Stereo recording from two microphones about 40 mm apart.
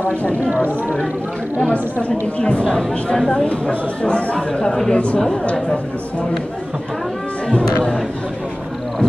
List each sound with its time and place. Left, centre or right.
0.0 s speech: left
1.7 s speech: left
4.9 s speech: left
7.6 s speech: centre